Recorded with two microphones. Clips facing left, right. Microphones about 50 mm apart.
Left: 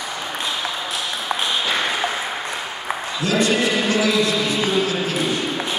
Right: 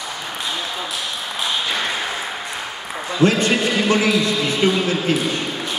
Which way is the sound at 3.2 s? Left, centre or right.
Right.